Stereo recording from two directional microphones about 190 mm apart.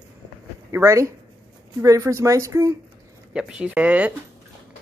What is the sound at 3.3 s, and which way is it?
Speech, 5° right (ahead or behind).